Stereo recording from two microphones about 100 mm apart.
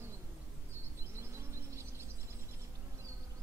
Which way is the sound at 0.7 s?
25° right (ahead or behind).